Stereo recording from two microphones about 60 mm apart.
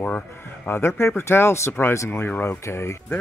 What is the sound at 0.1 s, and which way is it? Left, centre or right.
Speech, left.